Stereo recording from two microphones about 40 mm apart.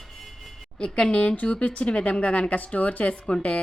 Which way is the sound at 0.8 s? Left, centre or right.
Left.